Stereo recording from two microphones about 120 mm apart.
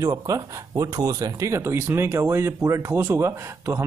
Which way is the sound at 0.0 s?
30° right (ahead or behind).